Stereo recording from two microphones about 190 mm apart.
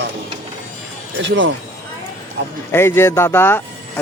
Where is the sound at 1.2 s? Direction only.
75° right (ahead or behind).